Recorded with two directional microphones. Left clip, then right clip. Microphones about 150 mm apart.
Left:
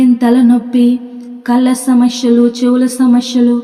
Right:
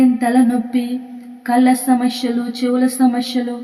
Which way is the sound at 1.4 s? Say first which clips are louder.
Left 2 dB; 25° left (ahead or behind).